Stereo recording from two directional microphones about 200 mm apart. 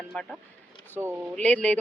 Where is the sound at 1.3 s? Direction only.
5° left (ahead or behind).